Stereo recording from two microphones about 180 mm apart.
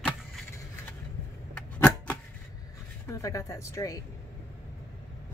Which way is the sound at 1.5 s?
5° left (ahead or behind).